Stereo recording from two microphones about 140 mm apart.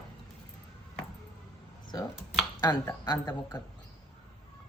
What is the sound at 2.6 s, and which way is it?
Speech, 30° left (ahead or behind).